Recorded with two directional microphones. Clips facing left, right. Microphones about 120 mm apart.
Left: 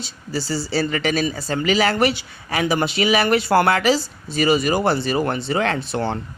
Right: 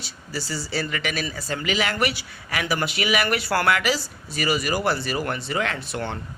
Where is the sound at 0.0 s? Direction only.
25° left (ahead or behind).